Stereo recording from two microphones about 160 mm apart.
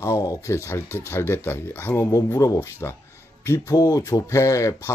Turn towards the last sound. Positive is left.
turn(degrees=20)  # may be behind; listen again after turning